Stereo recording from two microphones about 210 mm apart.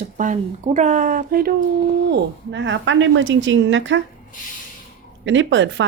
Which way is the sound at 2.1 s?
60° right (ahead or behind).